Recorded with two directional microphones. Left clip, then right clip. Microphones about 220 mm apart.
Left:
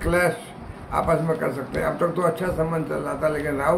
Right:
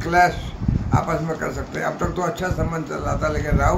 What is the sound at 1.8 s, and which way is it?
A man's voice, 5° left (ahead or behind).